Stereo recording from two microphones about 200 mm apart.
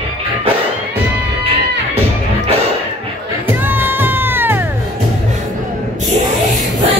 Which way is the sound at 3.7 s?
10° right (ahead or behind).